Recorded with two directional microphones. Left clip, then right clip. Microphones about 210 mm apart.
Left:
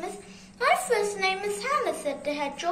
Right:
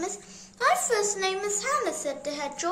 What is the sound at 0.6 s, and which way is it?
A woman's voice, 55° right (ahead or behind).